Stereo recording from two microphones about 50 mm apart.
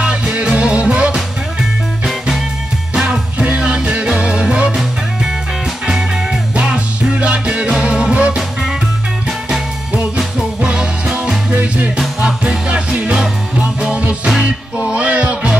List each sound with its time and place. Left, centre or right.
0.0 s music: right
2.9 s music: centre
5.9 s music: centre
6.5 s music: right
10.1 s music: right